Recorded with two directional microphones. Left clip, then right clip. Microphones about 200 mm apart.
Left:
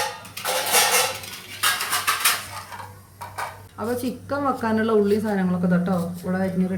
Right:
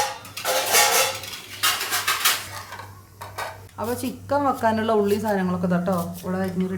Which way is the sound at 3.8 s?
15° right (ahead or behind).